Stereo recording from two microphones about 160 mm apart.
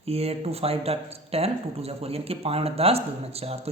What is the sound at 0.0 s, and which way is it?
Speech, 40° right (ahead or behind).